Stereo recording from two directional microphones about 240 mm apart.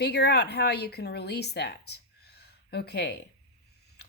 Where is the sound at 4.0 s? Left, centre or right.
Left.